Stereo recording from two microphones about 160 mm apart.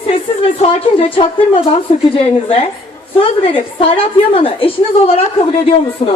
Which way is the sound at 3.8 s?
35° left (ahead or behind).